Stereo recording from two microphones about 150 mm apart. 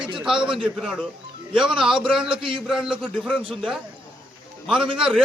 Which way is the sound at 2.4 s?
35° right (ahead or behind).